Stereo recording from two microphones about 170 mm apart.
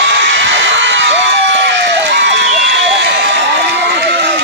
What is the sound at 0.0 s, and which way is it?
Crowd, 90° right.